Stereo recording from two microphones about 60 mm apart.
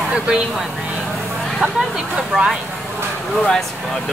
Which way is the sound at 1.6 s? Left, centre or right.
Centre.